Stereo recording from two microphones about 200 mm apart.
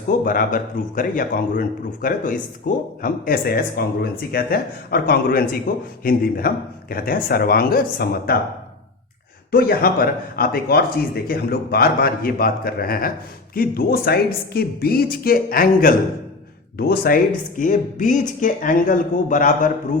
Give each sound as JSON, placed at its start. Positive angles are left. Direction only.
{"t": 0.3, "sound": "speech", "side_deg": 45}
{"t": 9.5, "sound": "speech", "side_deg": 50}